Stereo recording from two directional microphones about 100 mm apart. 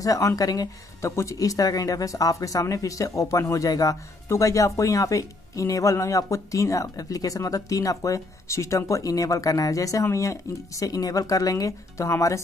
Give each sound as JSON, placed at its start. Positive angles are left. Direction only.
{"t": 0.0, "sound": "speech", "side_deg": 35}